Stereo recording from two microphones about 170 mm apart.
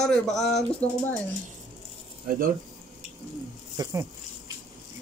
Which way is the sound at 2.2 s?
55° right (ahead or behind).